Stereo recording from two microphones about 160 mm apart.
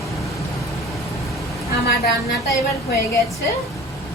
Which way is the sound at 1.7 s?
75° left (ahead or behind).